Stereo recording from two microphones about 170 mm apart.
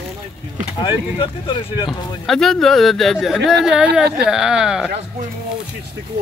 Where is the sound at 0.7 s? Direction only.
30° left (ahead or behind).